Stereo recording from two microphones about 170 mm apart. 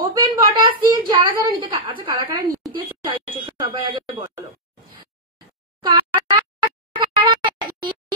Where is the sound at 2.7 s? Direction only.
25° right (ahead or behind).